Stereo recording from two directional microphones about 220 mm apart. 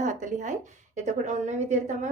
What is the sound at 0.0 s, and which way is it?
A woman's voice, 35° right (ahead or behind).